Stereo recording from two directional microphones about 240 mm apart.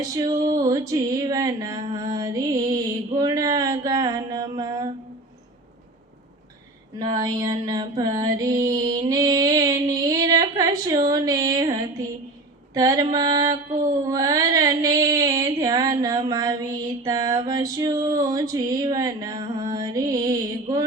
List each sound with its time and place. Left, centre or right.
0.0 s mantra: centre
7.0 s mantra: centre